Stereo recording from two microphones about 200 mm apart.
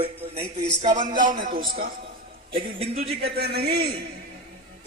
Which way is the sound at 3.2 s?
55° right (ahead or behind).